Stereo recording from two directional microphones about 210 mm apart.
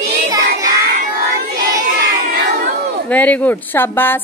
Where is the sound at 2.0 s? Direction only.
45° right (ahead or behind).